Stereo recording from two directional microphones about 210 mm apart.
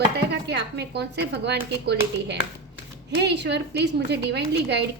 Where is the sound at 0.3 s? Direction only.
55° right (ahead or behind).